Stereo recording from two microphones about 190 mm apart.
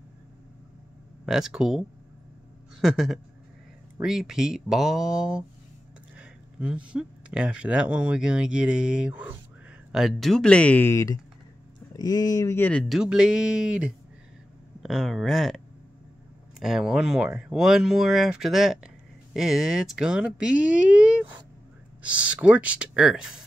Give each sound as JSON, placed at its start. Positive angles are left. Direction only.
{"t": 1.2, "sound": "speech", "side_deg": 0}
{"t": 6.1, "sound": "a sound", "side_deg": -5}
{"t": 7.6, "sound": "speech", "side_deg": -5}
{"t": 12.8, "sound": "speech", "side_deg": 0}